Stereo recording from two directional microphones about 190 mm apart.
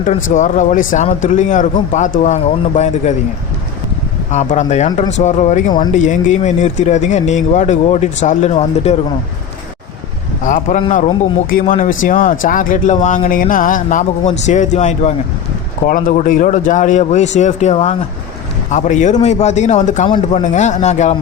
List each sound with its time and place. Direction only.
0.3 s speech: 40° left (ahead or behind)
4.3 s speech: 40° left (ahead or behind)
10.4 s speech: 45° left (ahead or behind)
20.1 s a man's voice: 25° left (ahead or behind)
20.4 s speech: 40° left (ahead or behind)